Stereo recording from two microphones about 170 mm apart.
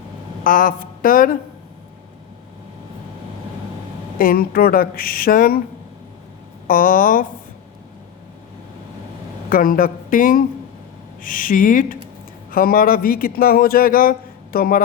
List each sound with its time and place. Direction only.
0.4 s speech: 50° left (ahead or behind)
4.2 s speech: 60° left (ahead or behind)
6.7 s speech: 55° left (ahead or behind)
9.5 s speech: 55° left (ahead or behind)